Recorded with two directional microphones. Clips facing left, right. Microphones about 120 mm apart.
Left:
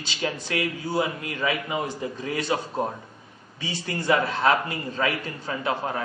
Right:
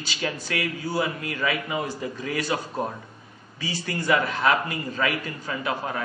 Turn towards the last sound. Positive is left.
turn(degrees=30)  # may be behind; listen again after turning